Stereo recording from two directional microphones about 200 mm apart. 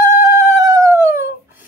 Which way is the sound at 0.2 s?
15° right (ahead or behind).